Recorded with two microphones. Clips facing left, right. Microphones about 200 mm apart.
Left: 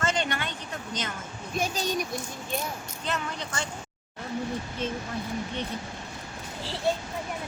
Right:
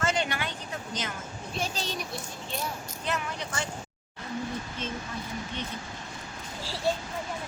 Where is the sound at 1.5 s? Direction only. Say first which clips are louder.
Left 5 dB; 15° left (ahead or behind).